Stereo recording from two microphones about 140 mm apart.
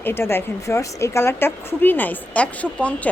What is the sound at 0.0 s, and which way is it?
A woman's voice, 15° left (ahead or behind).